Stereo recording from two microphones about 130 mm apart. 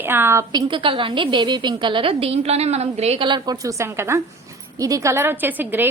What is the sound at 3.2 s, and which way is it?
A woman's voice, 35° right (ahead or behind).